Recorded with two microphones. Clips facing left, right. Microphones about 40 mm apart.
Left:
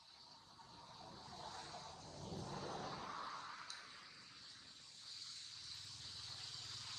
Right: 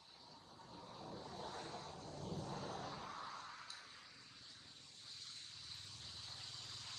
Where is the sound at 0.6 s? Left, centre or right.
Right.